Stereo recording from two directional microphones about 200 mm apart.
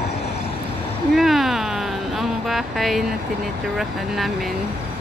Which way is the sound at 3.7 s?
Centre (ahead or behind).